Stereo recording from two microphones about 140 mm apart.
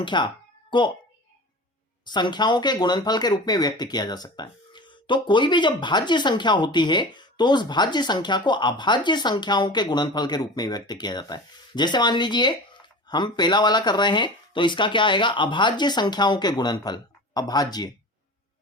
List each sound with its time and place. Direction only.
0.0 s speech: 35° left (ahead or behind)
2.0 s speech: 30° left (ahead or behind)